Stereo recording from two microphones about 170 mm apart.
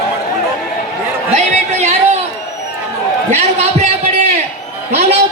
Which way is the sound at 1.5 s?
40° right (ahead or behind).